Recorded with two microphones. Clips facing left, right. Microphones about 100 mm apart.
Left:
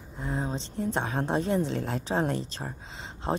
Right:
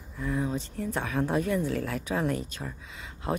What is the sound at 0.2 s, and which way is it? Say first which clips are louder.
A woman's voice: right 2 dB; 30° left (ahead or behind).